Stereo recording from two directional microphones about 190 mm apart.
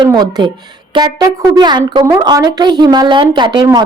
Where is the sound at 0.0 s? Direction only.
20° right (ahead or behind).